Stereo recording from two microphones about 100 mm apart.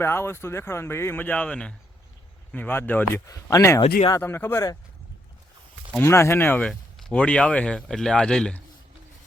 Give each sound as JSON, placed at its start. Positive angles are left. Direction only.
{"t": 0.0, "sound": "speech", "side_deg": 25}
{"t": 3.2, "sound": "speech", "side_deg": 30}
{"t": 3.8, "sound": "speech", "side_deg": 50}
{"t": 4.2, "sound": "speech", "side_deg": 25}
{"t": 6.0, "sound": "speech", "side_deg": 25}
{"t": 6.6, "sound": "speech", "side_deg": 10}